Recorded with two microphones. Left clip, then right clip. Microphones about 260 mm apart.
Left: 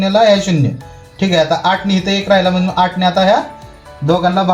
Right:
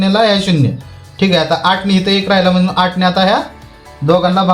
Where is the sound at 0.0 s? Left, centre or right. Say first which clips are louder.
Left 2 dB; right.